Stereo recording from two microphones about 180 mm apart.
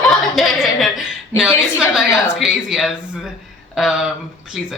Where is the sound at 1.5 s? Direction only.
15° left (ahead or behind).